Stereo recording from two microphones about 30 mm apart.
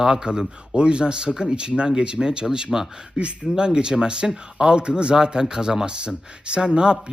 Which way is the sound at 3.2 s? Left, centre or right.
Right.